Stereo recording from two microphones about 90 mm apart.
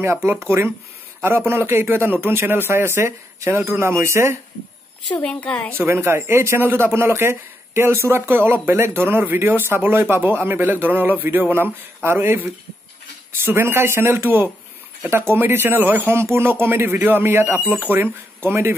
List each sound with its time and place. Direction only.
0.0 s a man's voice: 30° right (ahead or behind)
5.1 s a woman's voice: 15° left (ahead or behind)
5.8 s a man's voice: 25° right (ahead or behind)